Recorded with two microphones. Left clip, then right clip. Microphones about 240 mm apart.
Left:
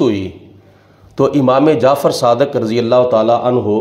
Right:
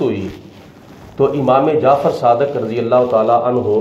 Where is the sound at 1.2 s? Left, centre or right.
Left.